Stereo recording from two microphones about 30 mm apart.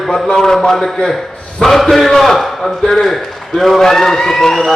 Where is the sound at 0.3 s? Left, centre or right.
Centre.